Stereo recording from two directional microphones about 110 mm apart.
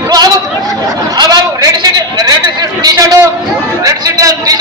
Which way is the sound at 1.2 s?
35° right (ahead or behind).